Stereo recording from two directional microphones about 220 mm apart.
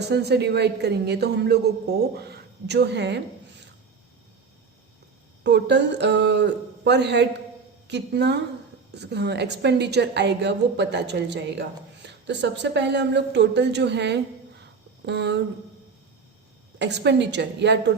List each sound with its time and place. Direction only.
0.0 s a woman's voice: 50° right (ahead or behind)
5.4 s a woman's voice: 50° right (ahead or behind)
16.7 s a woman's voice: 50° right (ahead or behind)